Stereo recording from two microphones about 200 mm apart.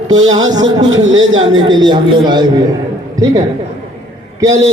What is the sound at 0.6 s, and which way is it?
A man's voice, 70° right (ahead or behind).